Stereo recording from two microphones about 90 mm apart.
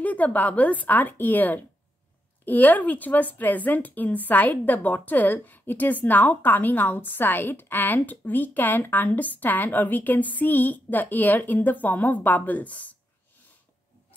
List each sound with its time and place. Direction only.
0.0 s a woman's voice: 15° left (ahead or behind)